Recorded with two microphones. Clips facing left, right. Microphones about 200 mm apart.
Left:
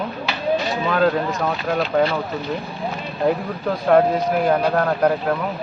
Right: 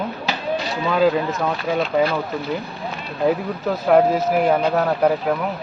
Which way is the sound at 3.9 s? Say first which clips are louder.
Right 1 dB; 5° right (ahead or behind).